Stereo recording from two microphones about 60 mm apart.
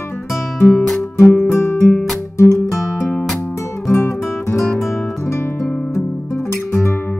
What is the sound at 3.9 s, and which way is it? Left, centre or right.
Music, left.